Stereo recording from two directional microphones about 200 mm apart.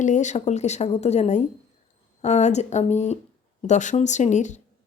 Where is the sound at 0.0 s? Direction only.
35° left (ahead or behind).